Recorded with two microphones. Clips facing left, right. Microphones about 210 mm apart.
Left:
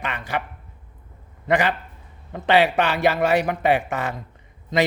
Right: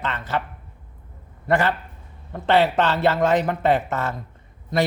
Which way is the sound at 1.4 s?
15° left (ahead or behind).